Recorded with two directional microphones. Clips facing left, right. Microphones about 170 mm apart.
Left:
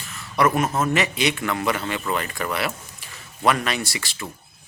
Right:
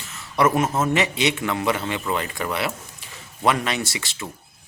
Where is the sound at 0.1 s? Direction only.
25° right (ahead or behind).